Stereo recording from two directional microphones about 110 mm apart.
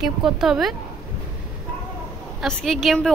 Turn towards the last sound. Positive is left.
turn(degrees=0)  # may be behind; listen again after turning